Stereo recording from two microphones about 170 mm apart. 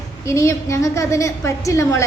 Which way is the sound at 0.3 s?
15° left (ahead or behind).